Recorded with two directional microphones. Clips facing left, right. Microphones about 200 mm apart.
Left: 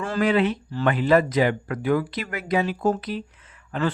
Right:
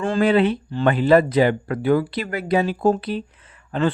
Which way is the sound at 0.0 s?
30° right (ahead or behind).